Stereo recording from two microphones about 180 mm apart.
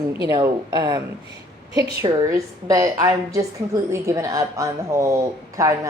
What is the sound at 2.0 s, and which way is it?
A woman's voice, 20° right (ahead or behind).